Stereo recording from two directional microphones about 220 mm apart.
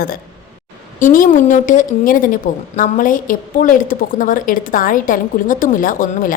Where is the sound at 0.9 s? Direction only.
35° left (ahead or behind).